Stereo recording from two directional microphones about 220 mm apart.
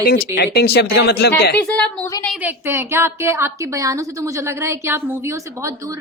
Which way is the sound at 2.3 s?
10° right (ahead or behind).